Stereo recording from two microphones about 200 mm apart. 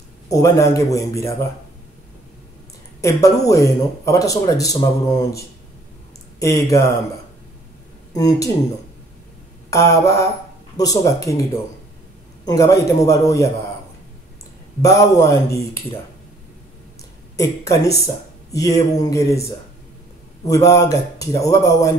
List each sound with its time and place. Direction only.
0.3 s speech: 15° left (ahead or behind)
3.0 s speech: 15° left (ahead or behind)
6.4 s speech: 15° left (ahead or behind)
8.1 s speech: 20° left (ahead or behind)
9.7 s a man's voice: 15° left (ahead or behind)
14.8 s speech: 15° left (ahead or behind)
17.4 s speech: 15° left (ahead or behind)
20.4 s speech: 15° left (ahead or behind)